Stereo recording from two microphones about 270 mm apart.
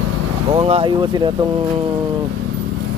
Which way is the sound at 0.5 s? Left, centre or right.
Right.